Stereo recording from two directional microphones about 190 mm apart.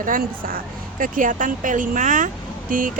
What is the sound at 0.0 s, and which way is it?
A woman's voice, 45° right (ahead or behind).